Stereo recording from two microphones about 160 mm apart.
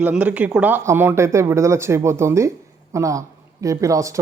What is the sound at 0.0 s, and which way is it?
Speech, 10° right (ahead or behind).